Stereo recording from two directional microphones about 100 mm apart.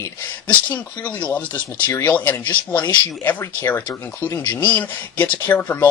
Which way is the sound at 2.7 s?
45° left (ahead or behind).